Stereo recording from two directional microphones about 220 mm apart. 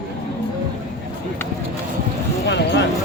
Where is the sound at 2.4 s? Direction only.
50° left (ahead or behind).